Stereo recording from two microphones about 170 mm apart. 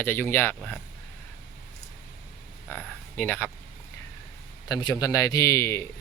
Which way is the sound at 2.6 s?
10° left (ahead or behind).